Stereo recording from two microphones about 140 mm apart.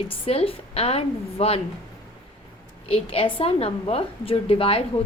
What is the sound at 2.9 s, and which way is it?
A woman's voice, 40° left (ahead or behind).